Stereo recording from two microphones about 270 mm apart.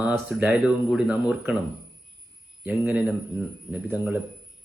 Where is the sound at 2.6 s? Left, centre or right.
Centre.